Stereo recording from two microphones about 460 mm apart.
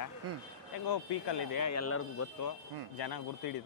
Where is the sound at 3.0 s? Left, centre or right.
Left.